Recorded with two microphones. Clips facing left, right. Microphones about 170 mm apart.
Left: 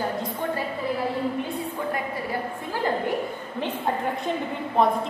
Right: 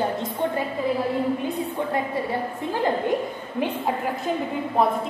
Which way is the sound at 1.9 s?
25° right (ahead or behind).